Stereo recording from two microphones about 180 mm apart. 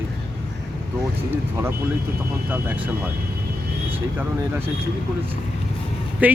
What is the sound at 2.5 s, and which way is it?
Speech, 10° right (ahead or behind).